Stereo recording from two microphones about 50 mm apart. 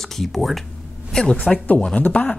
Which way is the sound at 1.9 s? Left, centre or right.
Left.